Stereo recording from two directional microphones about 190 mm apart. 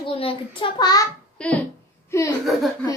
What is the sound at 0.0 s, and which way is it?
A child's voice, 30° left (ahead or behind).